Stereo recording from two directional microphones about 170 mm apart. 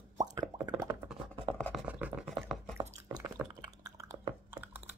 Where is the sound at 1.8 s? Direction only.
5° right (ahead or behind).